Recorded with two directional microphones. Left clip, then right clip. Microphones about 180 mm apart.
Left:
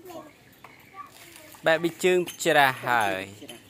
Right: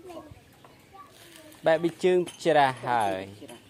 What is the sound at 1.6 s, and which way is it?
Speech, 15° right (ahead or behind).